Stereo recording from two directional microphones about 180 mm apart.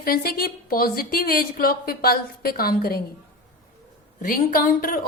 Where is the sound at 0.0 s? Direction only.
55° left (ahead or behind).